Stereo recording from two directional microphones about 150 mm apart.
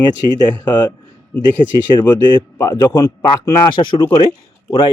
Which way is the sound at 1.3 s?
10° left (ahead or behind).